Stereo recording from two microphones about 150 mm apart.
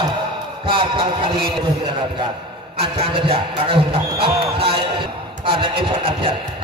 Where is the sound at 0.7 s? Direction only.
35° right (ahead or behind).